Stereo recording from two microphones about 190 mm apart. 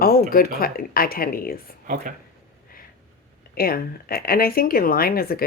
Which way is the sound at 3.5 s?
50° left (ahead or behind).